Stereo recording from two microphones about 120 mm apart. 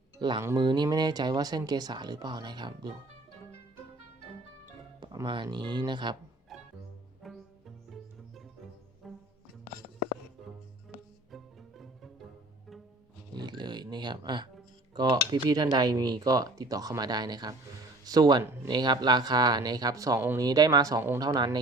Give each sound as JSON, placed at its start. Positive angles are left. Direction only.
{"t": 0.2, "sound": "speech", "side_deg": -40}
{"t": 5.2, "sound": "speech", "side_deg": -40}
{"t": 6.5, "sound": "music", "side_deg": 0}
{"t": 11.3, "sound": "music", "side_deg": 0}
{"t": 13.3, "sound": "music", "side_deg": -35}
{"t": 14.9, "sound": "speech", "side_deg": -35}